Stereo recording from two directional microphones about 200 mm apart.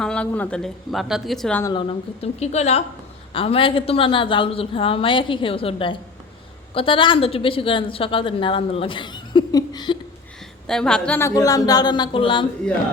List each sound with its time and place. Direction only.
0.0 s speech: 5° left (ahead or behind)
1.6 s a woman's voice: 25° left (ahead or behind)
10.7 s a woman's voice: 5° left (ahead or behind); by 12.5 s 25° left (ahead or behind)